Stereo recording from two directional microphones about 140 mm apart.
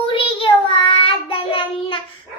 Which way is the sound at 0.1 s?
40° left (ahead or behind).